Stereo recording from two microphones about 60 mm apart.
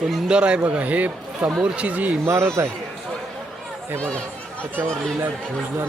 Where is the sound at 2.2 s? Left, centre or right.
Right.